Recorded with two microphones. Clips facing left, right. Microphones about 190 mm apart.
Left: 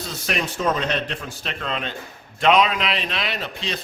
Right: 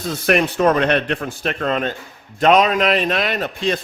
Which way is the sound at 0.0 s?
55° right (ahead or behind).